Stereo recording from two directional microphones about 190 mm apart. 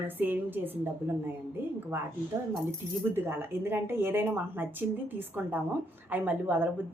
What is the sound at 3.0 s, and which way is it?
Speech, 10° right (ahead or behind).